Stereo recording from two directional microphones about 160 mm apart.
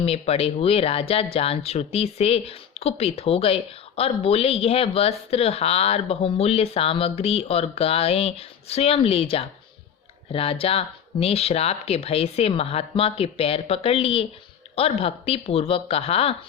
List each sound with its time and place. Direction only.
0.0 s speech: 40° left (ahead or behind)